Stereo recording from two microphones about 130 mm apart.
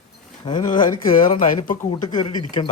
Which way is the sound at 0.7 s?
90° left.